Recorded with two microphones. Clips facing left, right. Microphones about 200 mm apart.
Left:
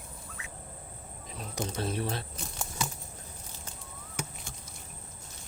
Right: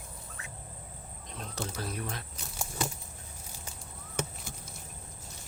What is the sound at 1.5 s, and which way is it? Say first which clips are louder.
Speech: left 5 dB; 25° left (ahead or behind).